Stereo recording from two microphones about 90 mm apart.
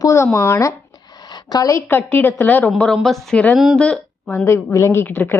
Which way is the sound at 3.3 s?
15° left (ahead or behind).